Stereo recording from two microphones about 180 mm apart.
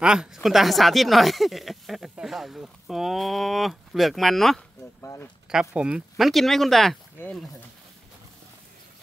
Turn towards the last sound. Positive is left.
turn(degrees=5)  # may be behind; listen again after turning